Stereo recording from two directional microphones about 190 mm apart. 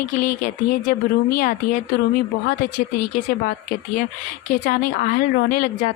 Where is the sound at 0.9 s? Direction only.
45° left (ahead or behind).